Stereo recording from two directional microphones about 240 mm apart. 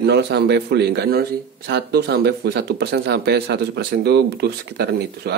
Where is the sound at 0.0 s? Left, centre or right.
Right.